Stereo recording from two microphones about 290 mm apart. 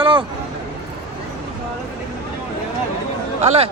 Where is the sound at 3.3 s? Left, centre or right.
Right.